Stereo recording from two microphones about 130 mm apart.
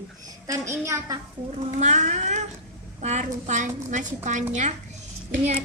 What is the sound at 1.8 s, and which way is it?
A woman's voice, 65° right (ahead or behind).